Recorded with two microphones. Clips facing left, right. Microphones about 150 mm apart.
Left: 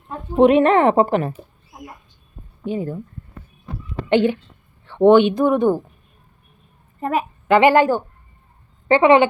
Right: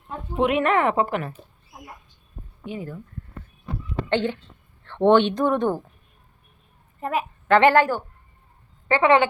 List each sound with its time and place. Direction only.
0.3 s a woman's voice: 30° left (ahead or behind)
2.6 s a woman's voice: 30° left (ahead or behind)
4.1 s speech: 15° left (ahead or behind)
7.0 s a woman's voice: 40° left (ahead or behind)
7.4 s a woman's voice: 10° left (ahead or behind)